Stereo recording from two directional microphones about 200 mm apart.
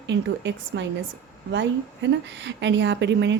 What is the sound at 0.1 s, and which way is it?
Speech, 60° right (ahead or behind).